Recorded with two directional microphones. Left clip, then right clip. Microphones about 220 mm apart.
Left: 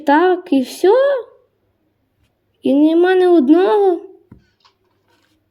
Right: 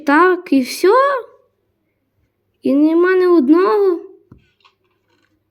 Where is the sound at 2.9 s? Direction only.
5° right (ahead or behind).